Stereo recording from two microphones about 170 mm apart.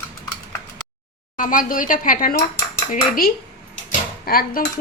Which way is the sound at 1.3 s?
50° left (ahead or behind).